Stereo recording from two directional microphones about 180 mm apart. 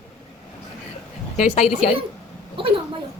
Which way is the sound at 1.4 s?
40° left (ahead or behind).